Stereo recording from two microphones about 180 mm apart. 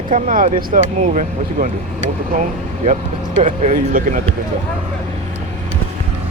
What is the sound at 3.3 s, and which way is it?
Speech, 45° right (ahead or behind).